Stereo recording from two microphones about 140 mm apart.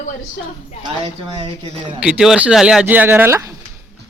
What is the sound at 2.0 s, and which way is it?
Speech, 5° right (ahead or behind).